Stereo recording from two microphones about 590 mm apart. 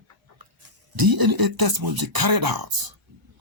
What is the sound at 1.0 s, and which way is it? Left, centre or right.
Speech, right.